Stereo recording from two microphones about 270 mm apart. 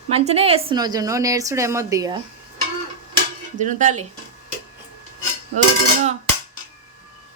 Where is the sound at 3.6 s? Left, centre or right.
Right.